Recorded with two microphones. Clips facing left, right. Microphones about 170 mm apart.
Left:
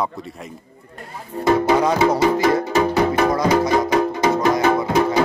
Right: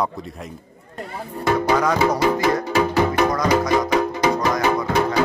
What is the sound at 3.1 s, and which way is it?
Music, 25° left (ahead or behind).